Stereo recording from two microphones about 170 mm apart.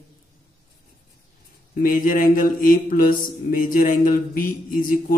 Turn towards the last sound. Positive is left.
turn(degrees=55)  # may be behind; listen again after turning